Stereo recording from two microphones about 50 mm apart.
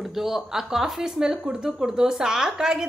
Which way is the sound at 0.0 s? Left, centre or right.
Centre.